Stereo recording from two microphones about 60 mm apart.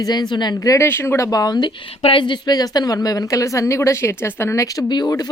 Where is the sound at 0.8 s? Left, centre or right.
Left.